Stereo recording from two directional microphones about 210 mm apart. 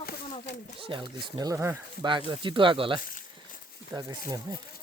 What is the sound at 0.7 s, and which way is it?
Speech, 25° right (ahead or behind).